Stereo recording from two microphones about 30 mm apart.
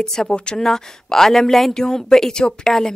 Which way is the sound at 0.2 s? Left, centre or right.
Left.